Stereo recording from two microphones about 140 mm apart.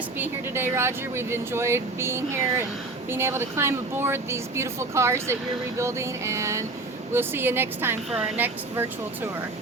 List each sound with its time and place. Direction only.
0.2 s speech: 15° right (ahead or behind)
8.1 s a woman's voice: 5° right (ahead or behind)
8.7 s speech: 20° right (ahead or behind)